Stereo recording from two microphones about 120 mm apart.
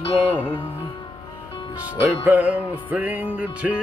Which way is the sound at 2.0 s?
15° right (ahead or behind).